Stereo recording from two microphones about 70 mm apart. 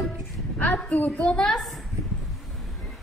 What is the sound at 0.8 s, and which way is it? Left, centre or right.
Speech, left.